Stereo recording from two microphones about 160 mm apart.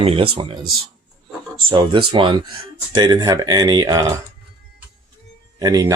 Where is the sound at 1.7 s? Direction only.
30° right (ahead or behind).